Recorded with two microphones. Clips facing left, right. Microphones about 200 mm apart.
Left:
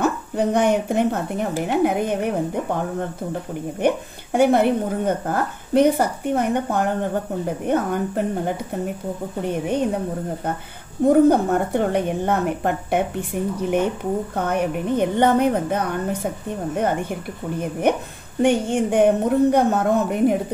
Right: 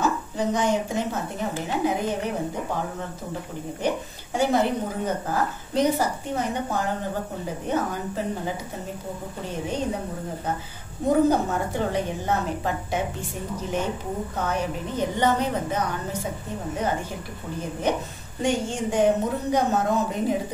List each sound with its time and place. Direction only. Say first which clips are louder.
0.0 s a woman's voice: left 4 dB; 60° left (ahead or behind)
3.8 s a woman's voice: left 6 dB; 60° left (ahead or behind)
11.1 s a woman's voice: left 6 dB; 60° left (ahead or behind)
17.9 s a woman's voice: left 5 dB; 55° left (ahead or behind)